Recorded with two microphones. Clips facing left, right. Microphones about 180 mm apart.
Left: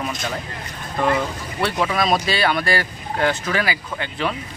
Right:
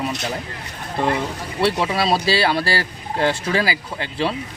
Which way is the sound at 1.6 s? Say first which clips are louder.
Right 1 dB; 25° right (ahead or behind).